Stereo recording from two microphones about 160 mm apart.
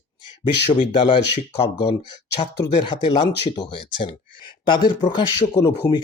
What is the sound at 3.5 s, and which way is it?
Speech, 30° left (ahead or behind).